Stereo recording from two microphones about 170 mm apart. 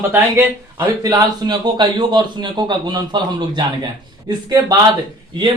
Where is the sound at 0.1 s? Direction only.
15° right (ahead or behind).